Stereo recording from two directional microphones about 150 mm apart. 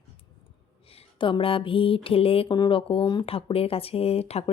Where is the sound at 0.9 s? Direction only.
35° left (ahead or behind).